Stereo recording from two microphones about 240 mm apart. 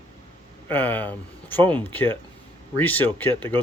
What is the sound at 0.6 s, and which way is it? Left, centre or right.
Speech, centre.